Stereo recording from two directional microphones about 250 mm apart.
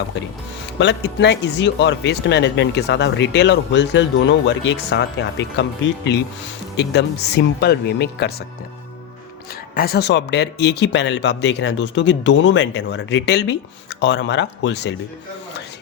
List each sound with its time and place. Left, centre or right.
0.8 s speech: left
6.7 s speech: left
9.7 s speech: left